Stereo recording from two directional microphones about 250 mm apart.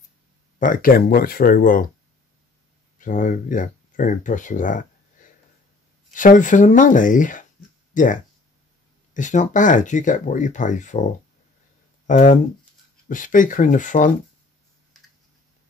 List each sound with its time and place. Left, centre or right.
0.6 s speech: left
3.0 s speech: left
6.1 s speech: left